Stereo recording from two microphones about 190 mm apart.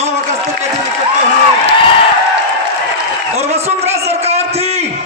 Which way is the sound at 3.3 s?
35° right (ahead or behind).